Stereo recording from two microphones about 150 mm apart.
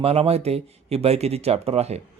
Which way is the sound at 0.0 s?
40° right (ahead or behind).